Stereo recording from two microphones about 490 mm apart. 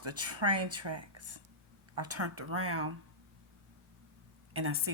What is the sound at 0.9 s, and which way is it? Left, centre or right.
Speech, right.